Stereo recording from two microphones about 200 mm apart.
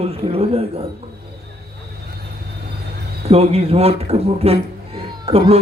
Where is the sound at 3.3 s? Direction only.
30° right (ahead or behind).